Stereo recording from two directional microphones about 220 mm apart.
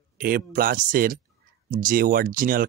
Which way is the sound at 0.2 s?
40° right (ahead or behind).